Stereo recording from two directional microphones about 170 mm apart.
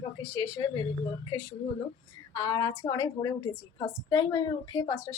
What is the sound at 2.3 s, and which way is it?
A woman's voice, 25° left (ahead or behind).